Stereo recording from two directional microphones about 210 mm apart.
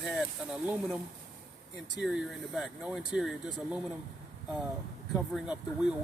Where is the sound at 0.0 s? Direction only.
Centre (ahead or behind).